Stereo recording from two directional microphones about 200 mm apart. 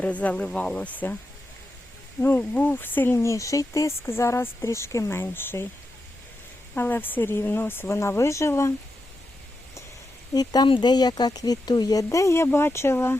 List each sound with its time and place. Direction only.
0.0 s speech: 5° left (ahead or behind)
2.2 s speech: 10° left (ahead or behind)
6.7 s speech: 10° left (ahead or behind)
10.3 s speech: 20° left (ahead or behind)